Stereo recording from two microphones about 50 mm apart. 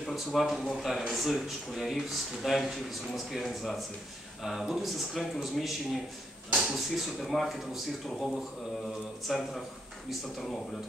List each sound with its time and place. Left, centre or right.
0.0 s a man's voice: centre
9.3 s a man's voice: centre